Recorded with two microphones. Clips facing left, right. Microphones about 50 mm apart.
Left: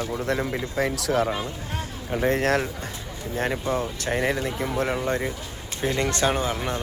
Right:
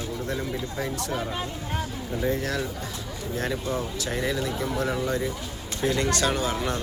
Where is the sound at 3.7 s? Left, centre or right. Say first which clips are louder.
Left 3 dB; left.